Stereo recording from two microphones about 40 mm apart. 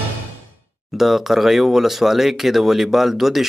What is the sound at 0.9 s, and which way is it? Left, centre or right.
Speech, centre.